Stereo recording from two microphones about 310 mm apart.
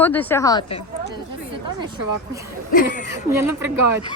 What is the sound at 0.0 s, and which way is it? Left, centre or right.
Speech, centre.